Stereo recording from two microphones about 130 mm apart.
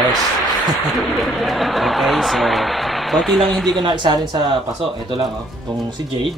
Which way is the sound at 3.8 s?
35° right (ahead or behind).